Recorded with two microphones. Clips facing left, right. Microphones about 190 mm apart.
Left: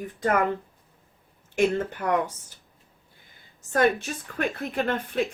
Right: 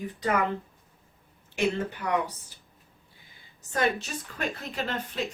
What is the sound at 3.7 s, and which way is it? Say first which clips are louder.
Speech: left 5 dB; 55° left (ahead or behind).